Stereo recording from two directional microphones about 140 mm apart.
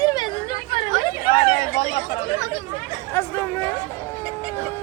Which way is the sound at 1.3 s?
40° left (ahead or behind).